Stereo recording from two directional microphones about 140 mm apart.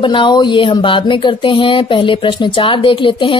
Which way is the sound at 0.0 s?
35° left (ahead or behind).